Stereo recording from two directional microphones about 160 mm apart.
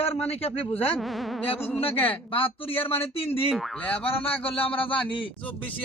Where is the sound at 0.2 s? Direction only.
40° left (ahead or behind).